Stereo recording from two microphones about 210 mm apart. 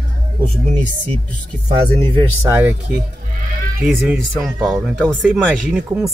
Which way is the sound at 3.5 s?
45° right (ahead or behind).